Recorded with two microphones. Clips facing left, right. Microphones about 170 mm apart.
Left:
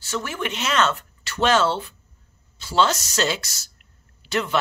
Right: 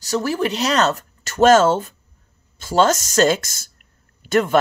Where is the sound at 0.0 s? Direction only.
40° right (ahead or behind).